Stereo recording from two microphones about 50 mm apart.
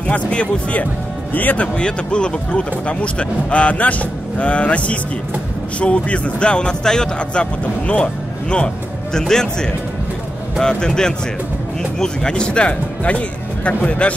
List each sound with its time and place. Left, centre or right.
0.0 s speech: left
1.8 s speech: centre